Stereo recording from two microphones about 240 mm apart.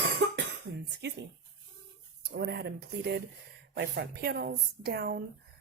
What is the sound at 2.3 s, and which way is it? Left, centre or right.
Speech, right.